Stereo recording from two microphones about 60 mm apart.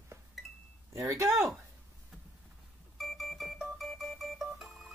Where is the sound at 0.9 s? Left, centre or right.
Right.